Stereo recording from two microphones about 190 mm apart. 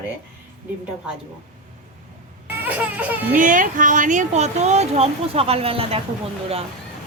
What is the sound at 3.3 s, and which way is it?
Speech, 45° right (ahead or behind).